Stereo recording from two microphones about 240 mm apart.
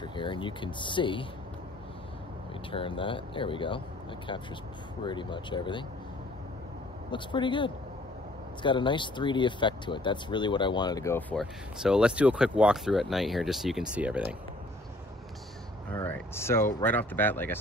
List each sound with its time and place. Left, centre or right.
0.0 s speech: centre
2.7 s speech: left
5.0 s speech: centre
7.1 s speech: centre
15.9 s speech: centre